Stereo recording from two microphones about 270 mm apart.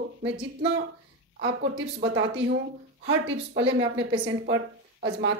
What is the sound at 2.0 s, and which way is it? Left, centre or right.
A woman's voice, right.